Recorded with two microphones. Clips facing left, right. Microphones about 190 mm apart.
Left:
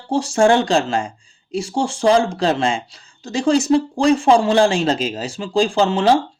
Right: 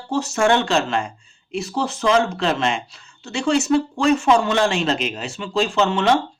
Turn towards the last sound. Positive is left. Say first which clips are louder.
# left 3 dB
turn(degrees=30)  # may be behind; listen again after turning